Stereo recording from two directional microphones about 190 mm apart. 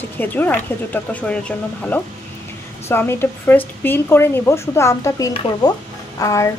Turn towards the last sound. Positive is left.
turn(degrees=15)  # may be behind; listen again after turning